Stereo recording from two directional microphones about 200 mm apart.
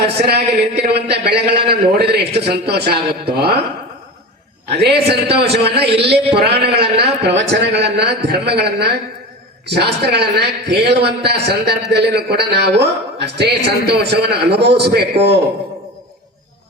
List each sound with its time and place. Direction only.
0.3 s a man's voice: 55° right (ahead or behind)
4.8 s a man's voice: 55° right (ahead or behind)
6.7 s a man's voice: 30° right (ahead or behind)
7.0 s a man's voice: 60° right (ahead or behind)